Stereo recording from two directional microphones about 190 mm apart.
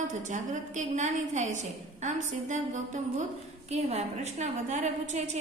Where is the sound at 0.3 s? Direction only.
40° right (ahead or behind).